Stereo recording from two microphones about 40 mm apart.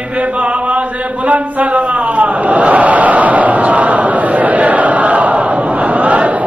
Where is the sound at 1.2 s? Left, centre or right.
Right.